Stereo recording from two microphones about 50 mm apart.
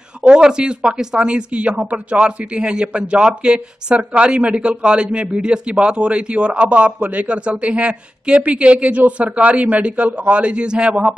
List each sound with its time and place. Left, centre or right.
0.2 s speech: centre